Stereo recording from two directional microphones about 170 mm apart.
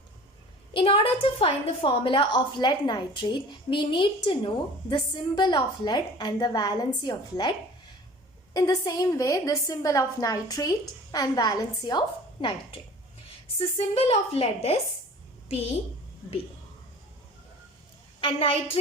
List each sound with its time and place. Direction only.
0.7 s a woman's voice: 30° left (ahead or behind)
8.5 s a woman's voice: 25° left (ahead or behind)
18.2 s a woman's voice: 30° left (ahead or behind)